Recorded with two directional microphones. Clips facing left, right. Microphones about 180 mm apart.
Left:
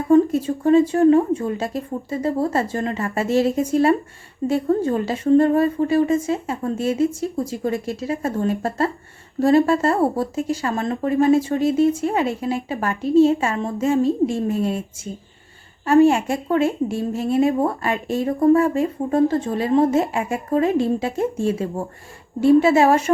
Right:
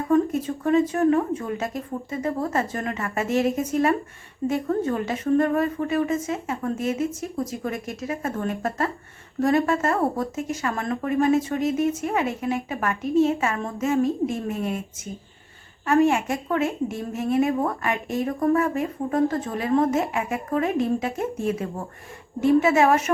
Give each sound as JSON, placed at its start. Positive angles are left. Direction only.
{"t": 0.1, "sound": "a woman's voice", "side_deg": 30}
{"t": 15.9, "sound": "a woman's voice", "side_deg": 30}